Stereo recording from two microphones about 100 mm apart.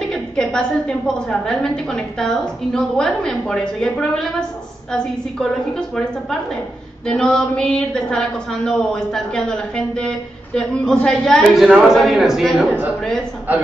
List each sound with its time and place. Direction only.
0.1 s a woman's voice: 5° left (ahead or behind)
7.1 s a woman's voice: 10° left (ahead or behind)
12.5 s a man's voice: 20° right (ahead or behind)